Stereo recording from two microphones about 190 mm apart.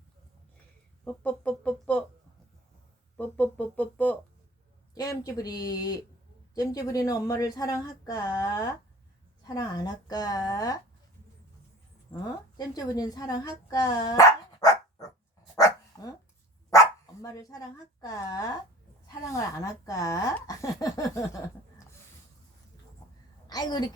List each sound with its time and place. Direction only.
1.0 s speech: 5° left (ahead or behind)
3.2 s speech: 10° left (ahead or behind)
4.9 s speech: 20° left (ahead or behind)
12.1 s a woman's voice: 15° left (ahead or behind)
16.7 s dog: 15° left (ahead or behind)
17.3 s speech: 20° left (ahead or behind)
23.5 s a woman's voice: 20° left (ahead or behind)